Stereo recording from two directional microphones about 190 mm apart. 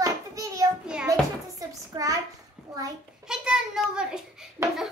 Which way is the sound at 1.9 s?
20° right (ahead or behind).